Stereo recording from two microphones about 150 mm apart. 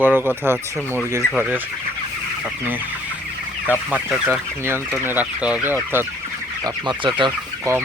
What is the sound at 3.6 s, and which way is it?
Speech, 10° right (ahead or behind).